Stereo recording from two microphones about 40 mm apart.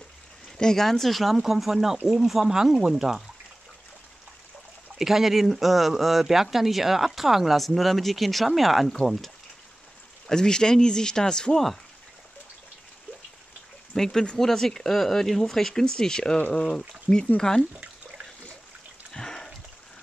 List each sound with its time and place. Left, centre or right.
0.6 s speech: centre
0.8 s speech: centre
4.9 s speech: centre
10.2 s speech: centre
13.9 s speech: centre
17.4 s speech: centre
19.1 s a sound: centre